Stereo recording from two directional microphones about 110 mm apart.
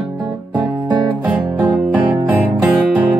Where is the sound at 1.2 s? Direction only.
15° right (ahead or behind).